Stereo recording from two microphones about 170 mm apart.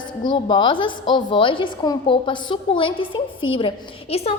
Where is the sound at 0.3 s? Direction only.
25° left (ahead or behind).